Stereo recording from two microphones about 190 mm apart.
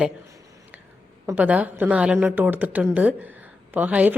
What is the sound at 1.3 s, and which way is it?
A woman's voice, 10° right (ahead or behind).